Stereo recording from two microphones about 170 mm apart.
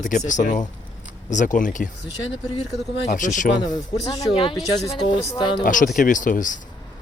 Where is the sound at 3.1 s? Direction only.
50° left (ahead or behind).